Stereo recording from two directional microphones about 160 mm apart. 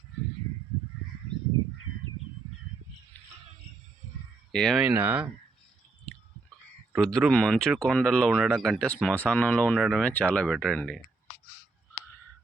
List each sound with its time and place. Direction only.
4.5 s speech: 5° left (ahead or behind)
4.8 s speech: 10° right (ahead or behind)
6.9 s speech: 5° left (ahead or behind)